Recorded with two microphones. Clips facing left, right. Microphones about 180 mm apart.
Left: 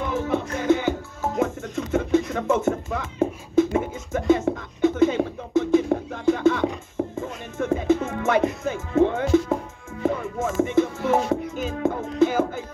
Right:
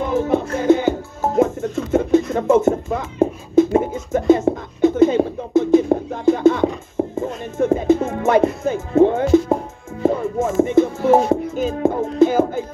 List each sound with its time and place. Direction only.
0.0 s music: 40° right (ahead or behind)
2.3 s a sound: 40° right (ahead or behind)
7.2 s music: 35° right (ahead or behind)
8.6 s speech: 40° right (ahead or behind)
10.0 s music: 35° right (ahead or behind)